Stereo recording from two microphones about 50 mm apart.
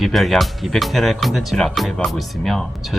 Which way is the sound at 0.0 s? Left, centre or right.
Centre.